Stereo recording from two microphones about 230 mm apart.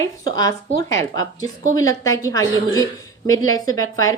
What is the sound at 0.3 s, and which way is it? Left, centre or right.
A woman's voice, centre.